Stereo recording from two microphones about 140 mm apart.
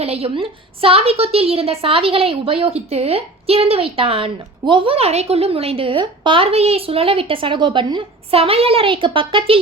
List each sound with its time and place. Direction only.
0.0 s a woman's voice: 45° right (ahead or behind)